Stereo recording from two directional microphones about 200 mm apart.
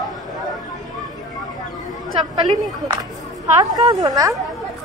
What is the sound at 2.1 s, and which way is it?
Speech, 30° right (ahead or behind).